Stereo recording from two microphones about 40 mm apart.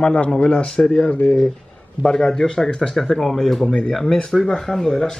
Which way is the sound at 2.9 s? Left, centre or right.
Centre.